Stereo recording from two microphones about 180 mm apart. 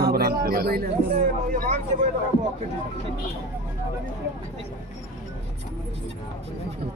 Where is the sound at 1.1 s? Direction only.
40° right (ahead or behind).